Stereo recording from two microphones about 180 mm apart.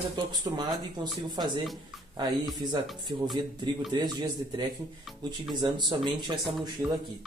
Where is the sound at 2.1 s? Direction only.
25° right (ahead or behind).